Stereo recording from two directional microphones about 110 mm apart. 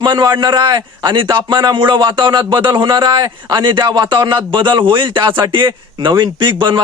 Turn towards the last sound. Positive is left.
turn(degrees=-45)  # may be behind; listen again after turning